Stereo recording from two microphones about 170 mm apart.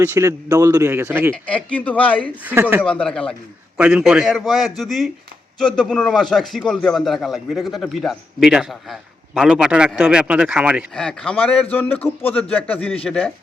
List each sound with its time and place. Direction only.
0.0 s a man's voice: 15° right (ahead or behind)
1.3 s a man's voice: 10° left (ahead or behind)
2.4 s a man's voice: 10° right (ahead or behind)
2.8 s a man's voice: 5° left (ahead or behind)
3.8 s a man's voice: 5° right (ahead or behind)
10.9 s a man's voice: 5° left (ahead or behind)